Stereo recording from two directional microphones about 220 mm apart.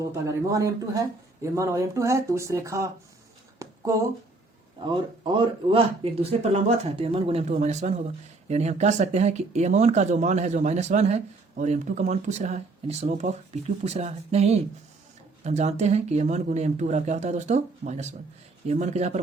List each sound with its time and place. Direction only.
0.0 s speech: 15° right (ahead or behind)
3.6 s a sound: 15° right (ahead or behind)
5.2 s speech: 20° right (ahead or behind)